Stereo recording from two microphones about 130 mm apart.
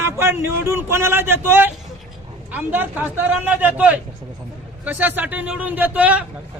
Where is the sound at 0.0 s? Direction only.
20° right (ahead or behind).